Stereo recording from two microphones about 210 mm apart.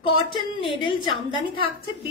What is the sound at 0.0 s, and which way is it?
A woman's voice, 25° left (ahead or behind).